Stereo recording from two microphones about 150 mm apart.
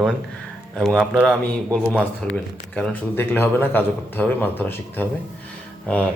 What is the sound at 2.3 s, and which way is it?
Speech, 5° left (ahead or behind).